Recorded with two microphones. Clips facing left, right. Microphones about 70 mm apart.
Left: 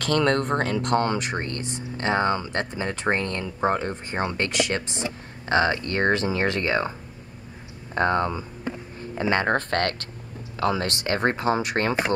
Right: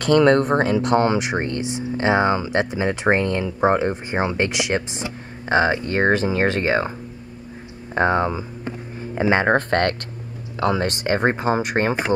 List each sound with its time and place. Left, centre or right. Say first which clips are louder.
0.0 s speech: right 7 dB; centre
7.9 s speech: right 3 dB; centre
11.1 s speech: right 3 dB; centre